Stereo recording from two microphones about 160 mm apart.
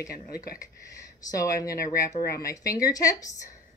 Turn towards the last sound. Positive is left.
turn(degrees=20)  # may be behind; listen again after turning